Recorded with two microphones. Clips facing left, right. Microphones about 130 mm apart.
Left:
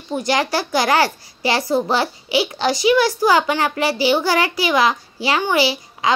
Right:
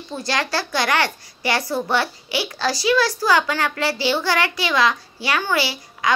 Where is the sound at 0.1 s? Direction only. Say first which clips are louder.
Left 5 dB; 20° left (ahead or behind).